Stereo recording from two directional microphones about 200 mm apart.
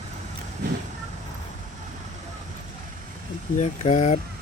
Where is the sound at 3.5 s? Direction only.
35° left (ahead or behind).